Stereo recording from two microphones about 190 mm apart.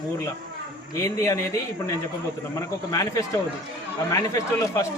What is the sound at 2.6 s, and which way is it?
Speech, 15° left (ahead or behind).